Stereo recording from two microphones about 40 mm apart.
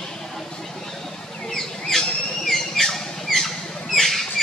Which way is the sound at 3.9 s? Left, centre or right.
Centre.